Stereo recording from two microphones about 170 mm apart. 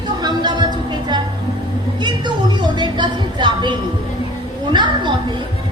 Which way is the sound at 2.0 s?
25° right (ahead or behind).